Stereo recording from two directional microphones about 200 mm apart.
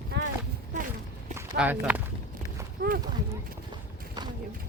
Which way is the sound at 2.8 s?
45° right (ahead or behind).